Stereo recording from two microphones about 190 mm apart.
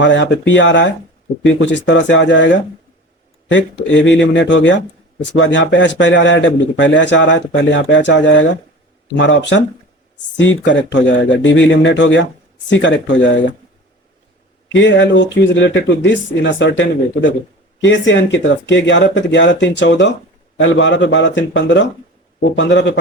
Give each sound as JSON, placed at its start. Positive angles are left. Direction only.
{"t": 0.0, "sound": "speech", "side_deg": 70}
{"t": 14.7, "sound": "speech", "side_deg": 75}
{"t": 20.6, "sound": "a man's voice", "side_deg": 80}